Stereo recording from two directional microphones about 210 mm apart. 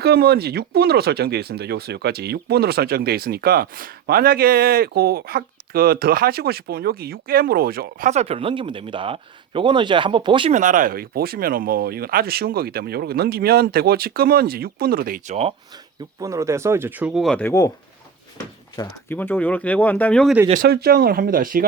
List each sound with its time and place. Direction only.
0.0 s speech: 50° right (ahead or behind); by 10.5 s 25° right (ahead or behind)
10.5 s speech: 40° right (ahead or behind)
16.2 s speech: 15° right (ahead or behind); by 17.7 s 10° left (ahead or behind)
18.8 s speech: 10° left (ahead or behind)
20.5 s speech: 45° right (ahead or behind)